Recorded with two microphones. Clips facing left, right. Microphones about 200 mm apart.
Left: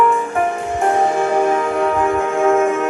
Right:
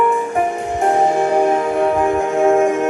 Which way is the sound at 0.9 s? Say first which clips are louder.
Right 2 dB; 20° right (ahead or behind).